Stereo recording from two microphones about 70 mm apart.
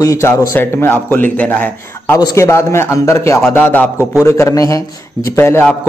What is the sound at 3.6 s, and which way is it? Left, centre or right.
Speech, left.